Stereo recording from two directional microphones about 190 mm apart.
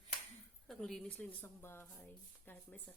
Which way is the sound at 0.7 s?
Centre (ahead or behind).